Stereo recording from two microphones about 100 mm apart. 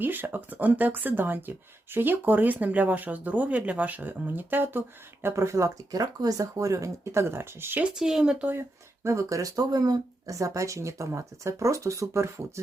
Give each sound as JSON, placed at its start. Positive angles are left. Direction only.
{"t": 0.0, "sound": "speech", "side_deg": -20}
{"t": 7.9, "sound": "speech", "side_deg": -5}
{"t": 9.0, "sound": "speech", "side_deg": -30}